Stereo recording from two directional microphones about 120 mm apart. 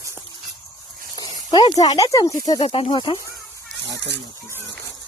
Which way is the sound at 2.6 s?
55° left (ahead or behind).